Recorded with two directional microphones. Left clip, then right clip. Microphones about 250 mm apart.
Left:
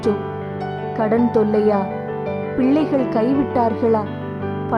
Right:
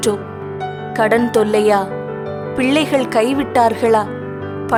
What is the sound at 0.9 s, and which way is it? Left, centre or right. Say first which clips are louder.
Speech: right 4 dB; right.